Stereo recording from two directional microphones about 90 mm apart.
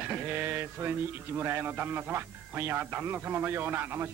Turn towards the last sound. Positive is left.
turn(degrees=-25)  # may be behind; listen again after turning